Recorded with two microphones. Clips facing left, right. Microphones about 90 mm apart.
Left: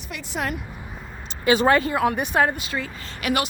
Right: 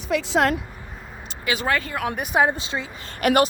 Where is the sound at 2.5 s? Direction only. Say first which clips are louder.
Even; 25° right (ahead or behind).